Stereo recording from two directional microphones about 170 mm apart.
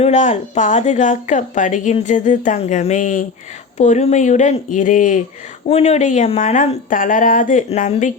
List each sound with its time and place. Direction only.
0.0 s speech: 45° left (ahead or behind)
5.6 s speech: 35° left (ahead or behind)